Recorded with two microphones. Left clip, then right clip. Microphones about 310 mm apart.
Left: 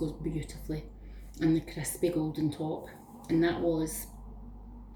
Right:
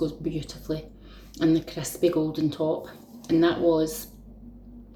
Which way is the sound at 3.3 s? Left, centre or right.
Centre.